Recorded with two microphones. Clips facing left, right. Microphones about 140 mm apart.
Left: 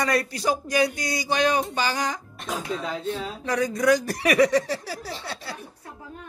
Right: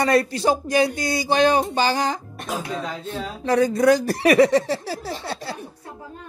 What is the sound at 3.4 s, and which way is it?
Speech, 30° right (ahead or behind).